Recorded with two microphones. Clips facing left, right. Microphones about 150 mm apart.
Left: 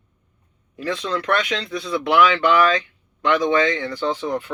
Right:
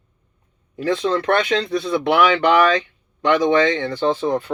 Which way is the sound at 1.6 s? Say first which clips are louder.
Right 6 dB; 50° right (ahead or behind).